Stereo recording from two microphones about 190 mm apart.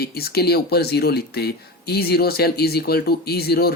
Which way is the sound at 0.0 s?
55° left (ahead or behind).